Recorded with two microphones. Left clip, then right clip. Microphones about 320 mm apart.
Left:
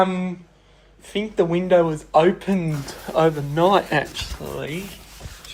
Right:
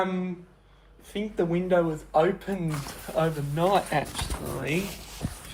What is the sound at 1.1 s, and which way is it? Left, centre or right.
Speech, left.